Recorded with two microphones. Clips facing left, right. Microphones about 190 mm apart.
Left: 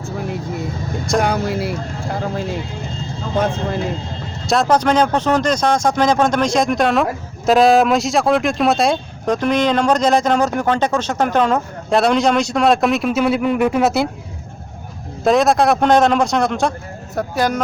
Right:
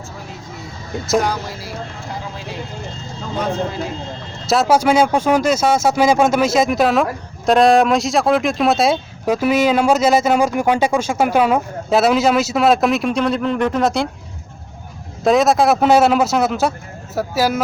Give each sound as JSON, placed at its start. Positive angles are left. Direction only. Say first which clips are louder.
{"t": 1.2, "sound": "speech", "louder": "left 4 dB", "side_deg": 60}
{"t": 4.4, "sound": "speech", "louder": "right 1 dB", "side_deg": -5}
{"t": 15.2, "sound": "speech", "louder": "even", "side_deg": 0}